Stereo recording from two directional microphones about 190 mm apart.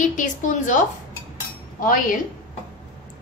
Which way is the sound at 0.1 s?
40° left (ahead or behind).